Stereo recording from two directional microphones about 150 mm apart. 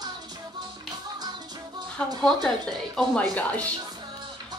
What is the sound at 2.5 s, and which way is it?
A woman's voice, centre (ahead or behind).